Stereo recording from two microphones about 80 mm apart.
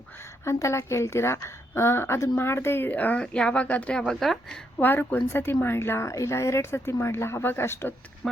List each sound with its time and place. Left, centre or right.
0.4 s a woman's voice: left; by 4.6 s centre
4.8 s a woman's voice: left
8.2 s a woman's voice: centre